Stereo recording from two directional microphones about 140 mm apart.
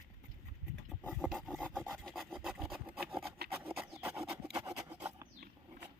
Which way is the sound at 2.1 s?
Centre (ahead or behind).